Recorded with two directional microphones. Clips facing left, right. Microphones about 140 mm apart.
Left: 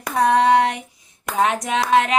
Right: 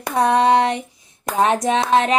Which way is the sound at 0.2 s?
25° right (ahead or behind).